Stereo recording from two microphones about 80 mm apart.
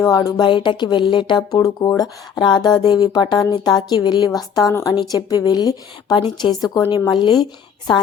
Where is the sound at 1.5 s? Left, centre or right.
Left.